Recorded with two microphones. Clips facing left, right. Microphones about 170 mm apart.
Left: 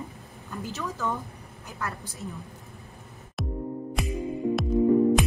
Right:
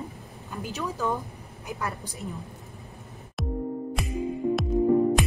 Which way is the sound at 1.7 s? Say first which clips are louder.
Right 1 dB; 15° right (ahead or behind).